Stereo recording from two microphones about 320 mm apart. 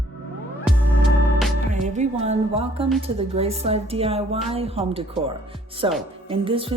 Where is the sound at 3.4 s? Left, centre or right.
Centre.